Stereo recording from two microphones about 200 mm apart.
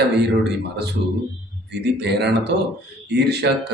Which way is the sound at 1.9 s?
55° right (ahead or behind).